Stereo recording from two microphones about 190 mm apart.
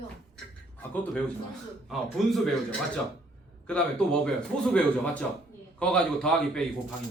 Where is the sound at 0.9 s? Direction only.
10° left (ahead or behind).